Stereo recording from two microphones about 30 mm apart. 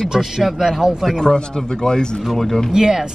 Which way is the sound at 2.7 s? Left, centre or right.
Right.